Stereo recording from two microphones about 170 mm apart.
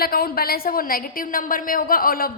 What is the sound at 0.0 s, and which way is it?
A woman's voice, 60° left (ahead or behind).